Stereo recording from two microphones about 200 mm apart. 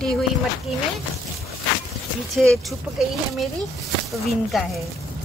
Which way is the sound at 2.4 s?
5° left (ahead or behind).